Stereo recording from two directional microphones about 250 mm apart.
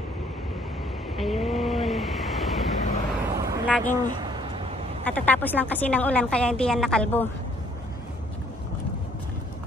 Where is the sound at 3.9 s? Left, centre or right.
Centre.